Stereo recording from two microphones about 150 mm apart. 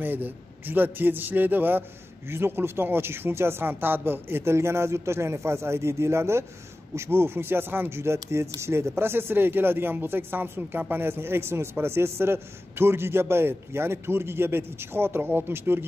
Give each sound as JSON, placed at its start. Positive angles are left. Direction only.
{"t": 0.0, "sound": "speech", "side_deg": -10}